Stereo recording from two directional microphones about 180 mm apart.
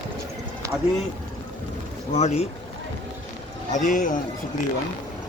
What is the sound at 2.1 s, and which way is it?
Speech, 35° left (ahead or behind).